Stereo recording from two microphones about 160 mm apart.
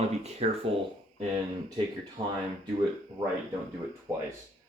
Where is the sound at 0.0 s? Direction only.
40° right (ahead or behind).